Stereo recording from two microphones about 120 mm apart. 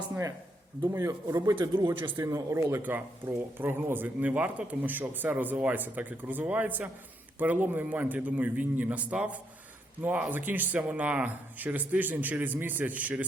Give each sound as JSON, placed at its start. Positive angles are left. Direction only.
{"t": 0.8, "sound": "speech", "side_deg": -25}